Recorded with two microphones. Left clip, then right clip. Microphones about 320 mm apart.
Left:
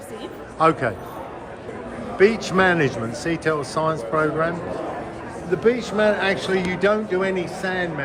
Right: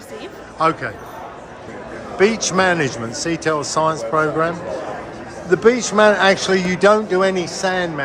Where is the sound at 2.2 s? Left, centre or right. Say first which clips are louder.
Right 2 dB; centre.